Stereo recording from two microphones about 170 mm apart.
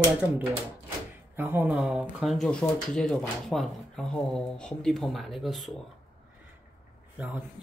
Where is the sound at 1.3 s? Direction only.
10° right (ahead or behind).